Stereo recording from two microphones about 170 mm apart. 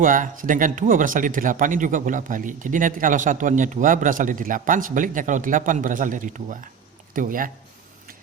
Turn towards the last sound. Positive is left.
turn(degrees=-55)  # may be behind; listen again after turning